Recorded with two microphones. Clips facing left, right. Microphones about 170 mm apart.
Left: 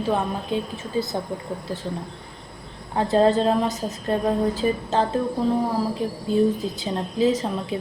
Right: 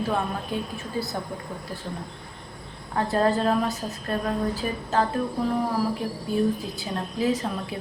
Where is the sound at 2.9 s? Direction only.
20° left (ahead or behind).